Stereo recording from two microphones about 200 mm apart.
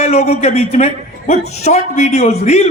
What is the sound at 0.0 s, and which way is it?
A man's voice, 35° left (ahead or behind).